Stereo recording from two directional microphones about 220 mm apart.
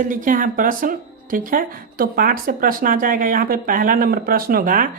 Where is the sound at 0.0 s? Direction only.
35° right (ahead or behind).